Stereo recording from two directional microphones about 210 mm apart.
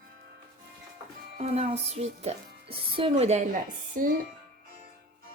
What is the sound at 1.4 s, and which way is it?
Speech, 30° right (ahead or behind).